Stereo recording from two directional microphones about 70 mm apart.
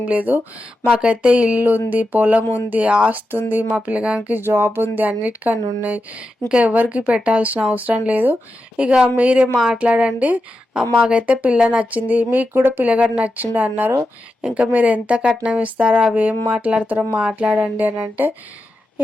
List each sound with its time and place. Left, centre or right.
0.0 s speech: right
4.4 s speech: right